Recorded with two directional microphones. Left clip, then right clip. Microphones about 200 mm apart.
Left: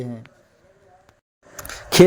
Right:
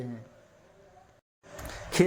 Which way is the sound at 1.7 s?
45° left (ahead or behind).